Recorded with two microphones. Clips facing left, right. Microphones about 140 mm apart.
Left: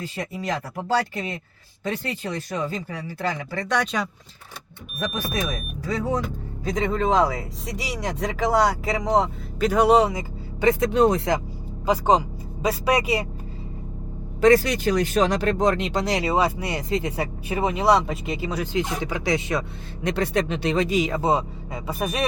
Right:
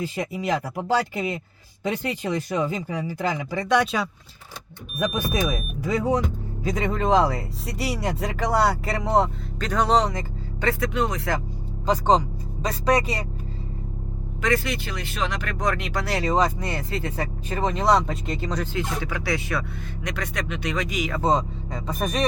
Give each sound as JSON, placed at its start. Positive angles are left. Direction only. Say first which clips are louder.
{"t": 0.0, "sound": "speech", "louder": "right 3 dB", "side_deg": -10}
{"t": 6.7, "sound": "speech", "louder": "even", "side_deg": -5}
{"t": 9.6, "sound": "speech", "louder": "left 4 dB", "side_deg": 10}
{"t": 10.9, "sound": "speech", "louder": "left 7 dB", "side_deg": 35}
{"t": 11.9, "sound": "speech", "louder": "even", "side_deg": 5}
{"t": 14.4, "sound": "speech", "louder": "left 8 dB", "side_deg": 35}
{"t": 21.2, "sound": "speech", "louder": "even", "side_deg": 10}